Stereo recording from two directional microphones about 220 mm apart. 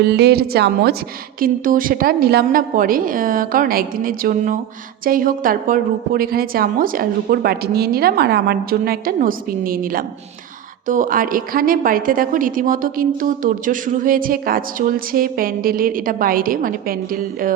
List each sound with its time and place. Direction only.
0.0 s a woman's voice: 50° right (ahead or behind)